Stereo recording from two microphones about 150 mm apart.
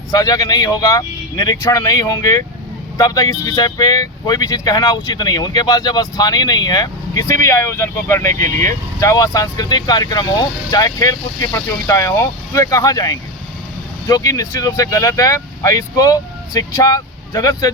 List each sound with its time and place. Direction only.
0.1 s speech: 25° left (ahead or behind)